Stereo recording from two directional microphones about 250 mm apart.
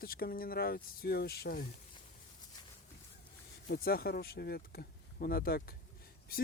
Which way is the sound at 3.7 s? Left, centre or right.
Left.